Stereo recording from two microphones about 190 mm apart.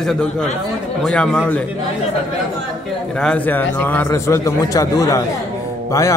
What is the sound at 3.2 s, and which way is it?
A man's voice, 5° left (ahead or behind).